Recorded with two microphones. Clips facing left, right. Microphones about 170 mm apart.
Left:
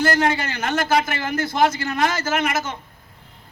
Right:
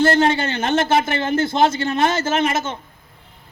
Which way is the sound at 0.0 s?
25° right (ahead or behind).